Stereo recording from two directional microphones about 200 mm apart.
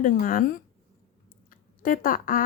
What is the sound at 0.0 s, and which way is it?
A woman's voice, 45° left (ahead or behind).